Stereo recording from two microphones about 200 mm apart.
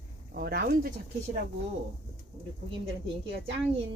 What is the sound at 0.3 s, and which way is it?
Speech, 50° right (ahead or behind).